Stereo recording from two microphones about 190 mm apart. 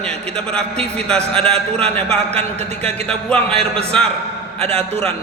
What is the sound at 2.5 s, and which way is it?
Speech, 35° right (ahead or behind).